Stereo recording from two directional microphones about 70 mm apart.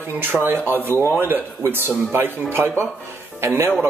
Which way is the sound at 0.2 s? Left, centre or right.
Right.